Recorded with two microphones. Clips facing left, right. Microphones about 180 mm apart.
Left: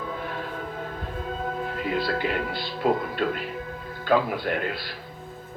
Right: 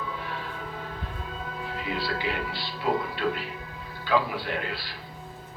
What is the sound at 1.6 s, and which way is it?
A man's voice, 50° left (ahead or behind).